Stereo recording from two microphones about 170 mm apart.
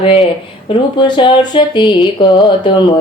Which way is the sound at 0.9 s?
25° left (ahead or behind).